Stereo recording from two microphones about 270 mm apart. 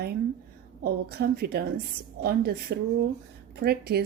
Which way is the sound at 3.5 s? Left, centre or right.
Right.